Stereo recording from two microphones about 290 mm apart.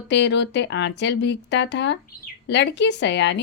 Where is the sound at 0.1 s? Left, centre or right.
Left.